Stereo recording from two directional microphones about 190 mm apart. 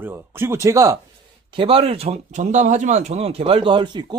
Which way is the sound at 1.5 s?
25° right (ahead or behind).